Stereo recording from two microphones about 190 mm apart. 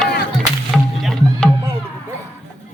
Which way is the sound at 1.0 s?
5° left (ahead or behind).